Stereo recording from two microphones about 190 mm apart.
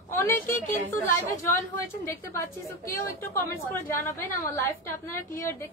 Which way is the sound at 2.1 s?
15° left (ahead or behind).